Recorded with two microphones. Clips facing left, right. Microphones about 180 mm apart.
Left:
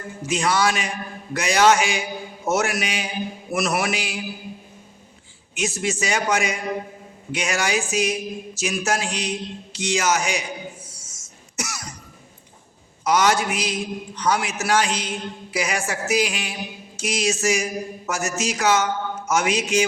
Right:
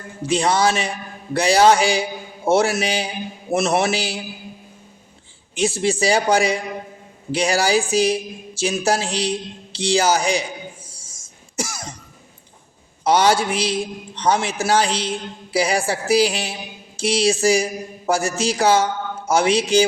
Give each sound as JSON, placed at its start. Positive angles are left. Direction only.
{"t": 0.2, "sound": "a man's voice", "side_deg": -30}
{"t": 5.5, "sound": "a man's voice", "side_deg": -30}
{"t": 10.8, "sound": "throat clearing", "side_deg": -30}
{"t": 13.1, "sound": "a man's voice", "side_deg": -30}